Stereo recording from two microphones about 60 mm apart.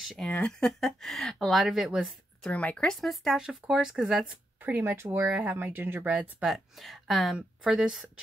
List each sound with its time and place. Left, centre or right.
0.5 s speech: centre
1.6 s speech: centre
2.5 s speech: left
2.9 s speech: centre
3.3 s speech: centre
4.6 s speech: right
5.6 s speech: right
6.0 s speech: right
6.4 s speech: centre
7.3 s speech: centre